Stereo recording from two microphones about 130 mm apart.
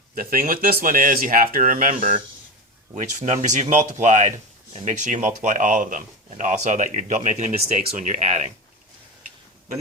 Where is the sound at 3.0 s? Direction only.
70° right (ahead or behind).